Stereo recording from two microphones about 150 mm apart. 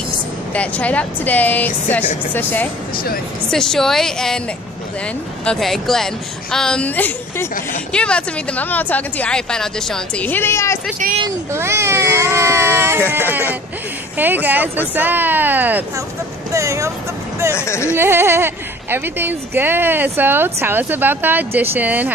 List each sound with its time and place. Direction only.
0.5 s a woman's voice: 10° left (ahead or behind)
5.4 s a woman's voice: 5° left (ahead or behind)
11.5 s speech: 15° right (ahead or behind)
17.6 s speech: 20° left (ahead or behind)
17.9 s speech: 15° right (ahead or behind)